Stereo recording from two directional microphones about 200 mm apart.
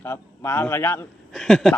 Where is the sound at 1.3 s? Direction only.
Centre (ahead or behind).